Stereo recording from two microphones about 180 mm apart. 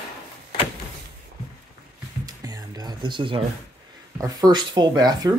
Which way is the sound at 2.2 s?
20° right (ahead or behind).